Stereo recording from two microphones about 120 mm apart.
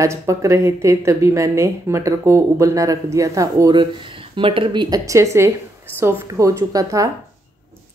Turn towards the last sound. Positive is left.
turn(degrees=-30)  # may be behind; listen again after turning